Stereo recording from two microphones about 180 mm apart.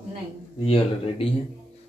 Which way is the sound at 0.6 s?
30° left (ahead or behind).